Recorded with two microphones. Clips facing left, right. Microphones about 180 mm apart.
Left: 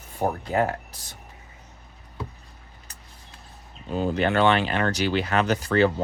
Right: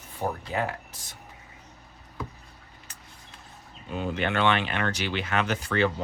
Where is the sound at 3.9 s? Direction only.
35° left (ahead or behind).